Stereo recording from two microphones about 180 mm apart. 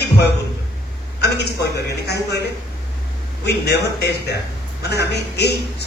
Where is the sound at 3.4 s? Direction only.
65° left (ahead or behind).